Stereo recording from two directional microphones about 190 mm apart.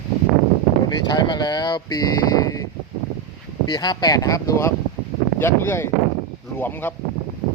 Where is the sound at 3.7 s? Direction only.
20° left (ahead or behind).